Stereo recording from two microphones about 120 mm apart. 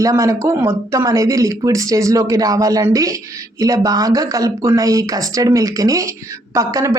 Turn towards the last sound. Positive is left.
turn(degrees=-30)  # may be behind; listen again after turning